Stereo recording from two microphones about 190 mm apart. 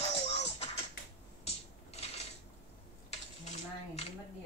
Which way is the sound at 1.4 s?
35° left (ahead or behind).